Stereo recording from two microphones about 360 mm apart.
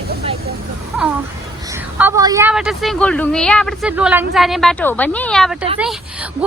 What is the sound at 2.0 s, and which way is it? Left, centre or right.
Speech, centre.